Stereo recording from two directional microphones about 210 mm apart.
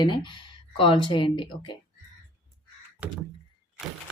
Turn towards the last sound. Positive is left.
turn(degrees=-5)  # may be behind; listen again after turning